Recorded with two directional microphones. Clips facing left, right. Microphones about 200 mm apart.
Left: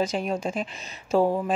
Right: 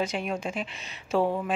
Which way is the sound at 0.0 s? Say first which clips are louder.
Left 3 dB; 35° left (ahead or behind).